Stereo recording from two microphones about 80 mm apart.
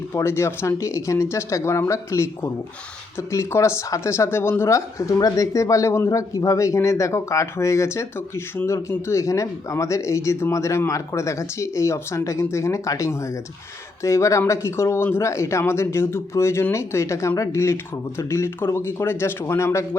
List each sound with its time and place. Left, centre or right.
0.1 s speech: left